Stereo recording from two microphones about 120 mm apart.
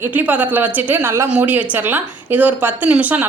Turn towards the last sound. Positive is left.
turn(degrees=-10)  # may be behind; listen again after turning